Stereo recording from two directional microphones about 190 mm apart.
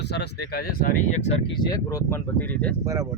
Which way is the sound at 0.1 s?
60° left (ahead or behind).